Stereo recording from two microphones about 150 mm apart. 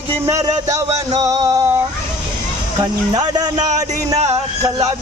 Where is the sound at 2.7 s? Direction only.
25° right (ahead or behind).